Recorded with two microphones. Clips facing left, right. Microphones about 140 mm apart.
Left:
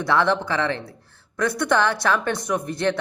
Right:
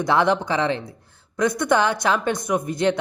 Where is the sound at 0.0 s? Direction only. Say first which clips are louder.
Right 1 dB; 20° right (ahead or behind).